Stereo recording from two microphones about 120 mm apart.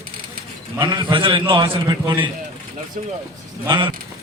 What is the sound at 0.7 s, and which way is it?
A man's voice, 40° right (ahead or behind).